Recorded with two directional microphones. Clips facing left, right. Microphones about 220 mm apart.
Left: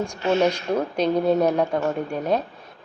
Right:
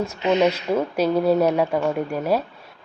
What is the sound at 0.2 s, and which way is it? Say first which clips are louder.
Speech: right 1 dB; 20° right (ahead or behind).